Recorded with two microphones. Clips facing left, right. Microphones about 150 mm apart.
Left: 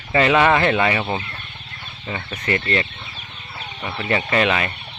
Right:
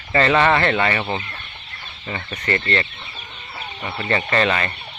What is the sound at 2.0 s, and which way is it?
Speech, 10° left (ahead or behind).